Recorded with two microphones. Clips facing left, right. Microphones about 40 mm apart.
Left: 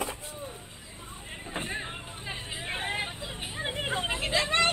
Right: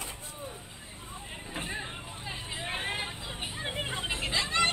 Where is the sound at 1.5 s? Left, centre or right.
Centre.